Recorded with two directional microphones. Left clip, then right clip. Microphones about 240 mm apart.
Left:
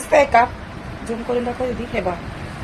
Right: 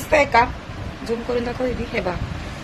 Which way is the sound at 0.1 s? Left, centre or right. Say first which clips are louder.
Left 2 dB; right.